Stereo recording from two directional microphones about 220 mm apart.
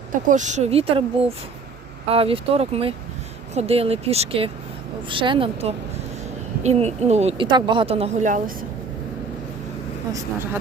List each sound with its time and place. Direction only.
0.1 s speech: 35° right (ahead or behind)
2.0 s speech: 25° right (ahead or behind)
10.1 s speech: 10° right (ahead or behind)